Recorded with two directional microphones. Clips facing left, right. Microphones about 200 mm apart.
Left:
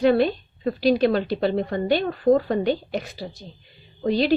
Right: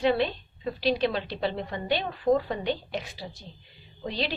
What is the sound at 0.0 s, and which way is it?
Speech, 45° left (ahead or behind).